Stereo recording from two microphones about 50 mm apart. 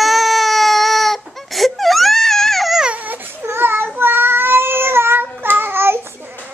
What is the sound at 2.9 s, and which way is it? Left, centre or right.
Baby cry, right.